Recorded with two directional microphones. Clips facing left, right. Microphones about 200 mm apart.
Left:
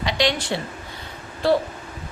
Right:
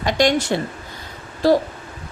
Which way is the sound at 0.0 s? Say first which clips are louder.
Right 5 dB; 50° right (ahead or behind).